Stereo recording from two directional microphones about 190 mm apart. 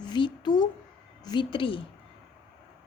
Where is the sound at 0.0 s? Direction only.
25° left (ahead or behind).